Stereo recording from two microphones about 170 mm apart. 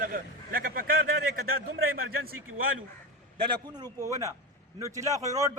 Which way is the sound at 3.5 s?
25° right (ahead or behind).